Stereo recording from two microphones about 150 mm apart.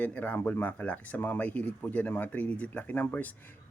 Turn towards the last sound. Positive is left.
turn(degrees=10)  # may be behind; listen again after turning